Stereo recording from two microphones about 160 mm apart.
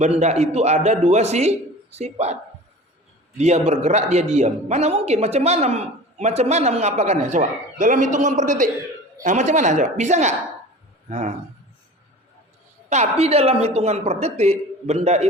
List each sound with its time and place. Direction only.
0.0 s a man's voice: 45° right (ahead or behind)
12.9 s a man's voice: 45° right (ahead or behind)